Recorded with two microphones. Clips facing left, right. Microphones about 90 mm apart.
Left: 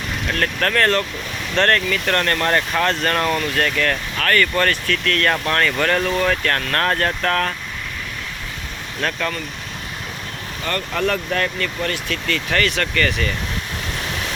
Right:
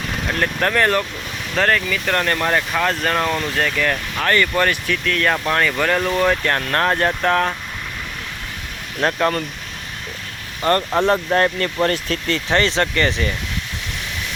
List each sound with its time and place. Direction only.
0.3 s speech: 15° right (ahead or behind)
9.0 s speech: 30° right (ahead or behind)
10.6 s speech: 35° right (ahead or behind)